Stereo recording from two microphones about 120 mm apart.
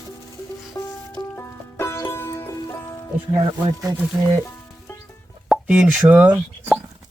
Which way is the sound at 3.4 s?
40° right (ahead or behind).